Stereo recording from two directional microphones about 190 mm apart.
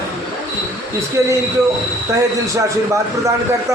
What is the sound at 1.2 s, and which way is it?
Speech, 15° right (ahead or behind).